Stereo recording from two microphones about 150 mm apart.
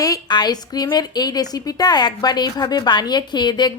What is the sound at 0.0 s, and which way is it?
A woman's voice, 25° left (ahead or behind).